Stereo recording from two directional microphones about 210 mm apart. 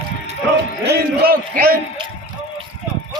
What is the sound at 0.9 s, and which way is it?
Speech, 45° right (ahead or behind).